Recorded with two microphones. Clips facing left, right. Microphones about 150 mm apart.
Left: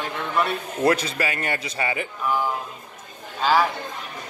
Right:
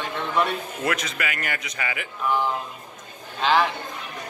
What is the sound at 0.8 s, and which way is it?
A man's voice, 30° left (ahead or behind).